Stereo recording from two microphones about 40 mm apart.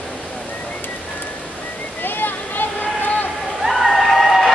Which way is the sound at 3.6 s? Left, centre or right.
Centre.